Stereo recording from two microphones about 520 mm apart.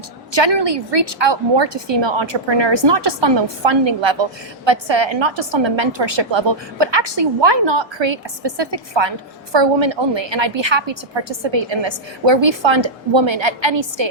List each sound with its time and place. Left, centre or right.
0.3 s a woman's voice: right